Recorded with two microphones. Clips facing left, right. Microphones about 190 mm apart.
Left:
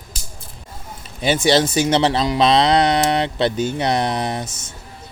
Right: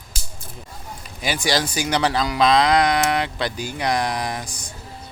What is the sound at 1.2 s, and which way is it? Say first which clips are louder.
Speech: left 7 dB; 25° left (ahead or behind).